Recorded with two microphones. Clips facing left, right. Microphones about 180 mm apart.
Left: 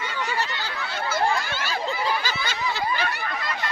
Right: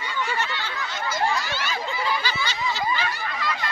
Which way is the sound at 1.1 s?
50° left (ahead or behind).